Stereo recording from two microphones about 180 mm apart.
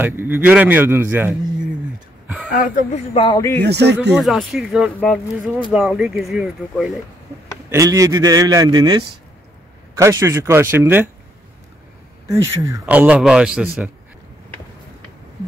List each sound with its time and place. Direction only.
0.0 s a man's voice: 10° right (ahead or behind)
2.2 s a sound: 5° right (ahead or behind)
3.2 s speech: 25° left (ahead or behind)
3.6 s speech: 70° right (ahead or behind)
4.2 s speech: centre (ahead or behind)
7.7 s a man's voice: 20° right (ahead or behind)
12.3 s a man's voice: 15° right (ahead or behind)